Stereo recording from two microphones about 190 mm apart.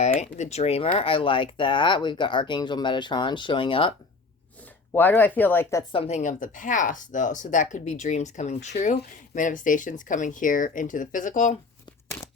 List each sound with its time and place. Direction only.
0.0 s speech: 35° left (ahead or behind)
4.9 s speech: 10° left (ahead or behind)
5.9 s speech: 35° left (ahead or behind)